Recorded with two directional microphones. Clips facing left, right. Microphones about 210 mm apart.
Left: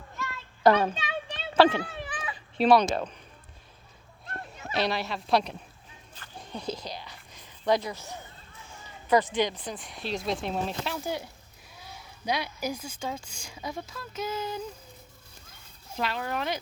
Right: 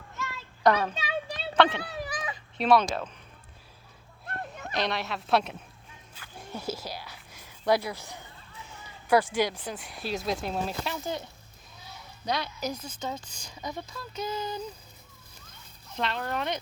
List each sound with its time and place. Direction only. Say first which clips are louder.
0.9 s a sound: right 2 dB; 35° right (ahead or behind)
1.5 s a child's voice: left 3 dB; 35° left (ahead or behind)
1.9 s a sound: right 2 dB; 40° right (ahead or behind)
2.6 s speech: left 2 dB; centre (ahead or behind)
4.3 s a sound: right 2 dB; 55° right (ahead or behind)
4.7 s speech: left 2 dB; centre (ahead or behind)
6.1 s whispering: even; 5° right (ahead or behind)
9.0 s speech: even; 10° right (ahead or behind)
11.0 s a woman's voice: left 1 dB; 10° left (ahead or behind)
16.0 s speech: even; 5° left (ahead or behind)